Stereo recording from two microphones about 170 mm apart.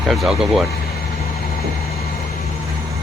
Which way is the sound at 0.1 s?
Centre (ahead or behind).